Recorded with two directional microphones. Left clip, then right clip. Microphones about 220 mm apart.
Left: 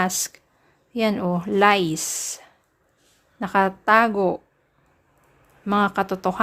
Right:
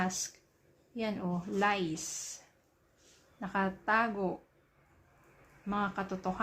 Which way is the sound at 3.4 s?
50° left (ahead or behind).